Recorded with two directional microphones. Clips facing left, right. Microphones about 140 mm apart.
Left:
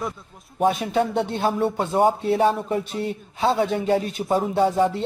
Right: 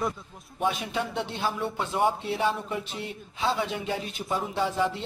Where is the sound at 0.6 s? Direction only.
45° left (ahead or behind).